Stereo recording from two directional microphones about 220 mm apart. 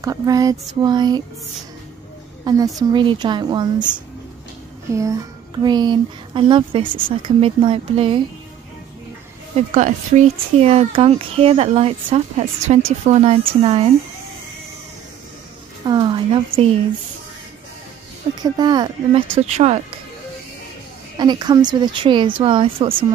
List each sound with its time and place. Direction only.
0.0 s a sound: 15° right (ahead or behind)
2.4 s speech: 15° right (ahead or behind)
9.6 s speech: 35° right (ahead or behind)
15.8 s a sound: 20° right (ahead or behind)
18.3 s speech: 20° right (ahead or behind)
21.2 s speech: 20° right (ahead or behind)